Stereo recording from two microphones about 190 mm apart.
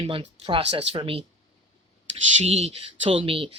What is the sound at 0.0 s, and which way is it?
Speech, 30° right (ahead or behind).